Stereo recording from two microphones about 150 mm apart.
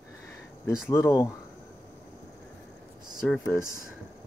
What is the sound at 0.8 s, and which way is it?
Speech, 20° left (ahead or behind).